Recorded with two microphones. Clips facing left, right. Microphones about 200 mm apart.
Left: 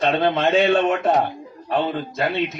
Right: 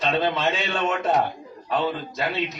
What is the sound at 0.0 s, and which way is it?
A man's voice, 55° left (ahead or behind).